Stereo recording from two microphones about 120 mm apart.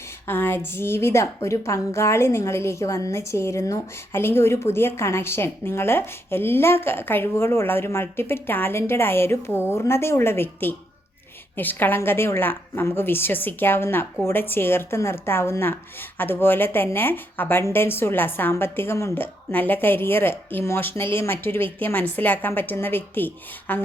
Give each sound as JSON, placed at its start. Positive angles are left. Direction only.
{"t": 0.3, "sound": "a woman's voice", "side_deg": 20}